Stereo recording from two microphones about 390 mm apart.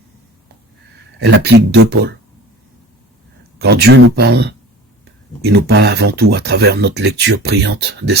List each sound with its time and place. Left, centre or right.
1.2 s speech: right
3.6 s speech: right